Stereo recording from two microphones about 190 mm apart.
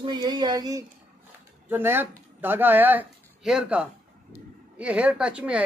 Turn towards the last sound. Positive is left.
turn(degrees=-5)  # may be behind; listen again after turning